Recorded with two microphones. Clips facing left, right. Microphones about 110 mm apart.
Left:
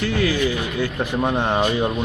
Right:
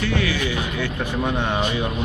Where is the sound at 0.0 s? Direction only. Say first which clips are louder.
Left 3 dB; 40° left (ahead or behind).